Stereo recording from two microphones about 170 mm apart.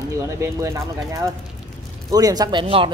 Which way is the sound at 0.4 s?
15° right (ahead or behind).